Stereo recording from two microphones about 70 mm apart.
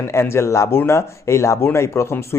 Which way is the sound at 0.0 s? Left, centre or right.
Left.